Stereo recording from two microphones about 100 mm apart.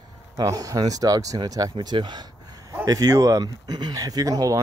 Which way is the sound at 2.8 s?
40° right (ahead or behind).